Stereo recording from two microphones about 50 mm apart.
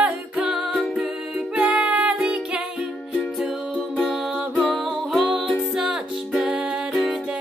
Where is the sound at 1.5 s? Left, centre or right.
Right.